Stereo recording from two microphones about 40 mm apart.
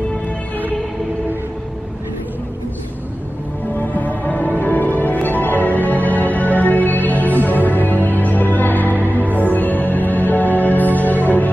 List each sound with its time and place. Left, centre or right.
3.8 s music: left